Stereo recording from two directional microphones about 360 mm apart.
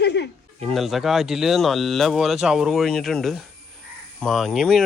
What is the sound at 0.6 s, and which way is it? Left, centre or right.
Speech, centre.